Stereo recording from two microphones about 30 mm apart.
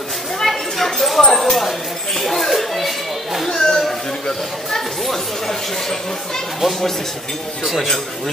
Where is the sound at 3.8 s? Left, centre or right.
Centre.